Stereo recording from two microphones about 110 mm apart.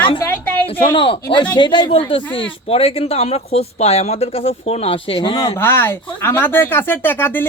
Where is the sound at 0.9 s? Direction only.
55° left (ahead or behind).